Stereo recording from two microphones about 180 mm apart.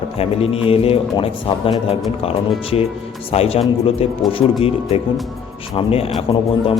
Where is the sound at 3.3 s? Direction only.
35° left (ahead or behind).